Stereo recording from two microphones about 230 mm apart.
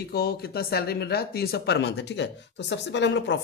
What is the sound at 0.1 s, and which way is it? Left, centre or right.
Speech, left.